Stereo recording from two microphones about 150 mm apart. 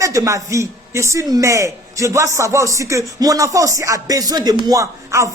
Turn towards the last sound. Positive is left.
turn(degrees=-20)  # may be behind; listen again after turning